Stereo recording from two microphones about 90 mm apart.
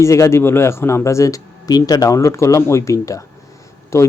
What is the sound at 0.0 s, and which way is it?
A man's voice, 30° left (ahead or behind).